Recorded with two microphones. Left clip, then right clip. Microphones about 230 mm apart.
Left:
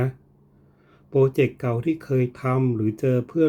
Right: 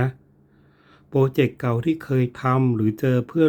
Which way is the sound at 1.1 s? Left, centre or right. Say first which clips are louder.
Left 1 dB; centre.